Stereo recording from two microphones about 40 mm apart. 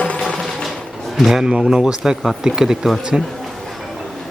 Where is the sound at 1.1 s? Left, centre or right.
Centre.